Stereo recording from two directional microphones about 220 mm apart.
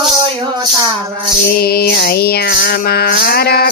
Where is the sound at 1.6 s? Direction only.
45° left (ahead or behind).